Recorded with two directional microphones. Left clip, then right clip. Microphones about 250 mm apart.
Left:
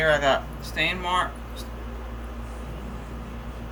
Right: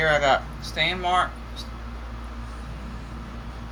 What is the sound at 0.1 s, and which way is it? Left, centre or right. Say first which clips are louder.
Speech: right 1 dB; centre.